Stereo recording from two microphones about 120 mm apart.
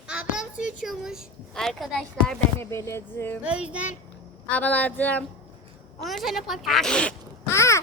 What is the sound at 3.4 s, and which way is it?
Child singing, 10° right (ahead or behind).